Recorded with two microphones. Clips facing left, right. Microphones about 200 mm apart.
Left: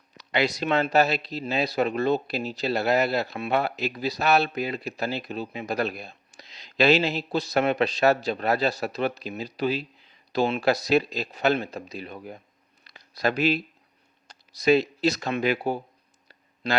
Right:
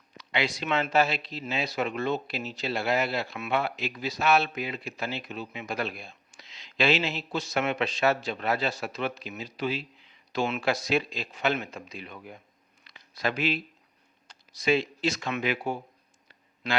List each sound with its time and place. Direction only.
0.2 s speech: 40° left (ahead or behind)
12.8 s a sound: 40° left (ahead or behind)
14.3 s speech: 40° left (ahead or behind)